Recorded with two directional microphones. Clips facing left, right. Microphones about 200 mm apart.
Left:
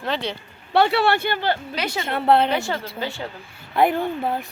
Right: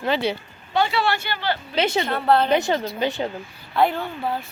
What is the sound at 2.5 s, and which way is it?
Speech, 20° right (ahead or behind).